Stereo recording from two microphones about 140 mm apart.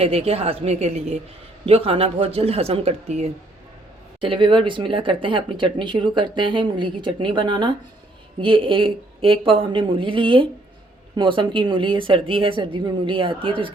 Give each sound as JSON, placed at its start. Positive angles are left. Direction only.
{"t": 0.0, "sound": "speech", "side_deg": -45}
{"t": 4.2, "sound": "speech", "side_deg": -35}